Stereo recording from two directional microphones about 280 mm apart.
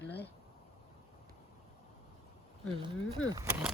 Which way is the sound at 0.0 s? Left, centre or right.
Left.